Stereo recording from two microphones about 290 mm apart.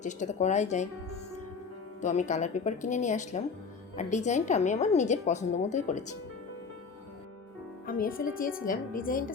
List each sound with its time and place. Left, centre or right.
0.0 s a woman's voice: left
2.0 s a woman's voice: left
7.9 s a woman's voice: left